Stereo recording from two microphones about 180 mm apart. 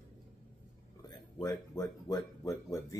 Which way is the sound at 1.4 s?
20° left (ahead or behind).